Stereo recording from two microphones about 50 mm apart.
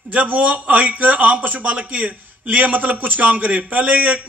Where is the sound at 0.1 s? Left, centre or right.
Right.